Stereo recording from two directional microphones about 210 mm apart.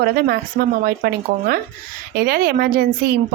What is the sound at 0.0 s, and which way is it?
Speech, 50° right (ahead or behind).